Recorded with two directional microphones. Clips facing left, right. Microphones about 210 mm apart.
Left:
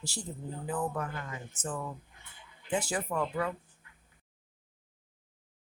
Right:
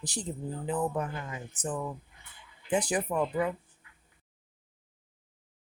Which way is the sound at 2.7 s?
20° right (ahead or behind).